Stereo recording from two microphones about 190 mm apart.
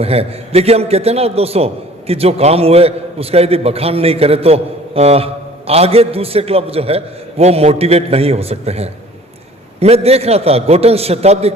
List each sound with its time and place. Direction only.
0.0 s a man's voice: 30° right (ahead or behind)